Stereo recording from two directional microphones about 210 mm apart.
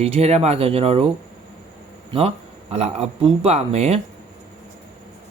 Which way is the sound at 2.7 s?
30° right (ahead or behind).